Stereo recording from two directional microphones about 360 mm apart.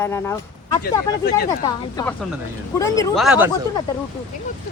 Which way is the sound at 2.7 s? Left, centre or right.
Centre.